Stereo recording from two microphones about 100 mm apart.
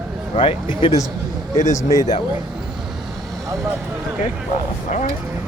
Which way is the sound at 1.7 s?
30° left (ahead or behind).